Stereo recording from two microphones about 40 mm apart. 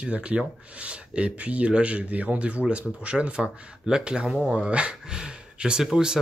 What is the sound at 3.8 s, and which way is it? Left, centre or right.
Speech, centre.